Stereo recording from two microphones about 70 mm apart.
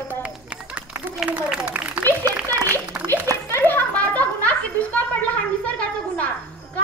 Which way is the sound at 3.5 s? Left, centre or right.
Left.